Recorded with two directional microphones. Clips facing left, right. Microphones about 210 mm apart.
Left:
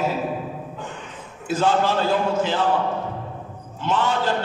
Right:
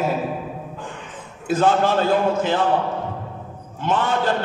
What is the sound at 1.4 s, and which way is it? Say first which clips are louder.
A man's voice: right 2 dB; 55° right (ahead or behind).